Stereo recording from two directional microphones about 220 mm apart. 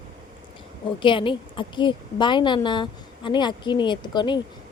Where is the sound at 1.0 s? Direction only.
20° left (ahead or behind).